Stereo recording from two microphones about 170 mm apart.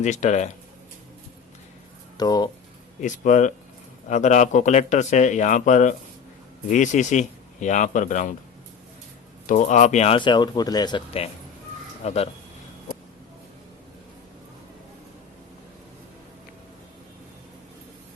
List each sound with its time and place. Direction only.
0.0 s speech: 45° left (ahead or behind)
2.1 s speech: 25° left (ahead or behind)
3.0 s speech: 45° left (ahead or behind)
9.5 s speech: 45° left (ahead or behind)
10.2 s speech: 25° left (ahead or behind)